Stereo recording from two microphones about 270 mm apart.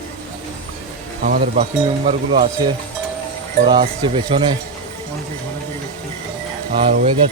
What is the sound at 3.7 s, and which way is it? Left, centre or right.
Speech, centre.